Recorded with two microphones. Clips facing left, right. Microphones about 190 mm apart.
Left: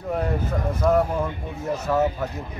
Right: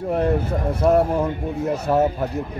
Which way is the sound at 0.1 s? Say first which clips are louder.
Right 4 dB; 25° right (ahead or behind).